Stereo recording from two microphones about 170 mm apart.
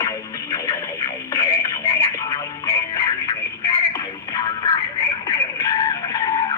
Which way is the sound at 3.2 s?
25° left (ahead or behind).